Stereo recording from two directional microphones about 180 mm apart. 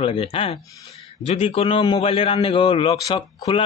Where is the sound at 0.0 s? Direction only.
30° left (ahead or behind).